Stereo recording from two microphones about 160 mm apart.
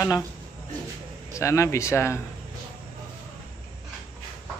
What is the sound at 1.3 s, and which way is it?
Speech, 20° left (ahead or behind).